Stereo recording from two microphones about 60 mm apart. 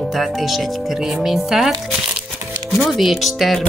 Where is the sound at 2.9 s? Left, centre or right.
Centre.